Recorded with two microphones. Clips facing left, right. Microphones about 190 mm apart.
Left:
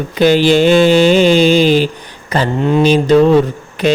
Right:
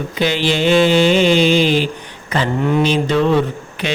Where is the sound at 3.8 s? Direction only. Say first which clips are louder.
Left 9 dB; 40° left (ahead or behind).